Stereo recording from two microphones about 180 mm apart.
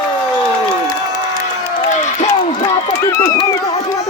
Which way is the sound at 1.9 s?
40° left (ahead or behind).